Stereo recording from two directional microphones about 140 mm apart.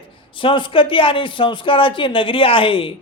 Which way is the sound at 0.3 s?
35° left (ahead or behind).